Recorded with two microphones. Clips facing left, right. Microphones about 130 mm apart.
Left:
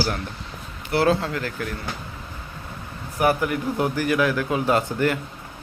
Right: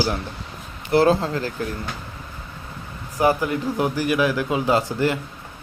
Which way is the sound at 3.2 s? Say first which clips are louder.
Right 1 dB; 20° right (ahead or behind).